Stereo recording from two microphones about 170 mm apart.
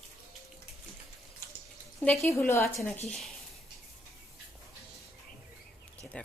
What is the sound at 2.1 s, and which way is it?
Speech, 15° left (ahead or behind).